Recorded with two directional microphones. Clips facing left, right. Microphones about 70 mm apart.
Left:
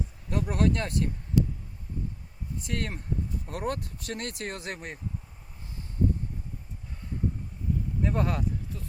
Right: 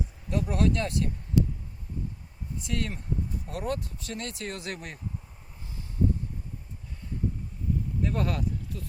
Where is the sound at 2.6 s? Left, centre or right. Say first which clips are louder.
Right 1 dB; left.